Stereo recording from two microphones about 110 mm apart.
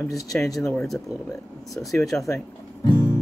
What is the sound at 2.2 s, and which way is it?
Music, 25° left (ahead or behind).